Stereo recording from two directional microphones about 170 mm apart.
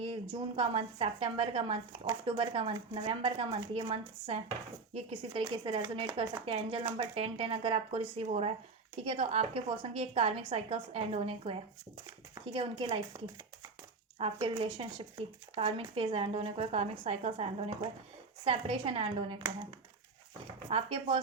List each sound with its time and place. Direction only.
0.0 s a woman's voice: 30° right (ahead or behind)
14.2 s a woman's voice: 35° right (ahead or behind)
20.7 s a woman's voice: 30° right (ahead or behind)